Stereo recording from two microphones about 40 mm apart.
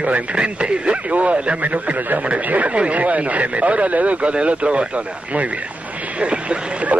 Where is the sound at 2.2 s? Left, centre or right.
Right.